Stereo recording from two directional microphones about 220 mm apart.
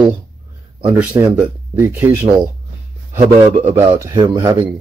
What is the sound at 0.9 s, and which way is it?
Speech, 5° right (ahead or behind).